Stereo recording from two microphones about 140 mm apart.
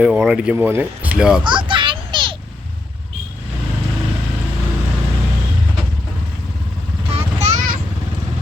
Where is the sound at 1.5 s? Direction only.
35° right (ahead or behind).